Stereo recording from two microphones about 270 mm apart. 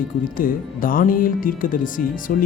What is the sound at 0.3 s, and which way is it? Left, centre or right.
Speech, left.